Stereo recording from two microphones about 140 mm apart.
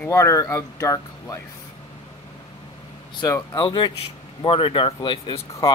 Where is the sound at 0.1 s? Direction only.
20° left (ahead or behind).